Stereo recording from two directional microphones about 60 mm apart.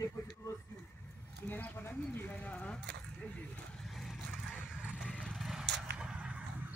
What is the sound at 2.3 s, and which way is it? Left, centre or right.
Speech, left.